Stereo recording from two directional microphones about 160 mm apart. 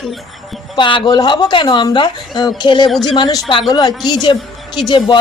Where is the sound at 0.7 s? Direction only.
30° left (ahead or behind).